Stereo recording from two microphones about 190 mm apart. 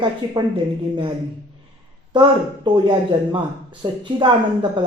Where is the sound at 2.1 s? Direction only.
25° right (ahead or behind).